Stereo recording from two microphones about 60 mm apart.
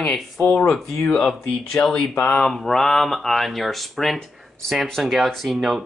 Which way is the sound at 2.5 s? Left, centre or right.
Centre.